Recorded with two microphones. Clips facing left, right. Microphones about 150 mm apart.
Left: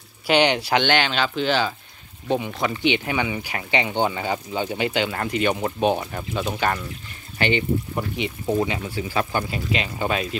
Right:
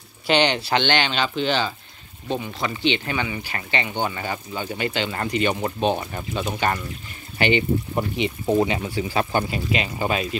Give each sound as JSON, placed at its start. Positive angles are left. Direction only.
{"t": 0.3, "sound": "speech", "side_deg": 10}
{"t": 2.2, "sound": "speech", "side_deg": 15}
{"t": 5.1, "sound": "speech", "side_deg": 0}
{"t": 7.3, "sound": "speech", "side_deg": -15}
{"t": 9.8, "sound": "speech", "side_deg": -10}